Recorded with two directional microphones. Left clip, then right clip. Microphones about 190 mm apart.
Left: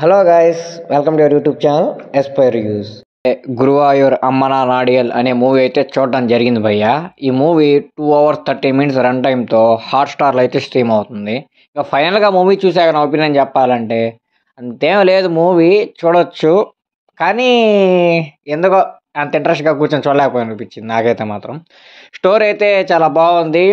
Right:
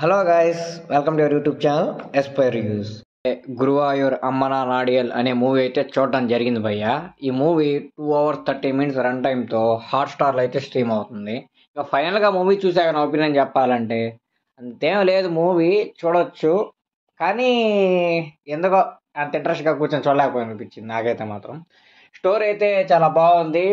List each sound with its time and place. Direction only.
0.0 s a man's voice: 30° left (ahead or behind)
3.2 s speech: 35° left (ahead or behind)
14.8 s speech: 45° left (ahead or behind)